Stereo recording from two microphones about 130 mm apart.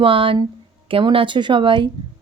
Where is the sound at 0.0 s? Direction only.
40° right (ahead or behind).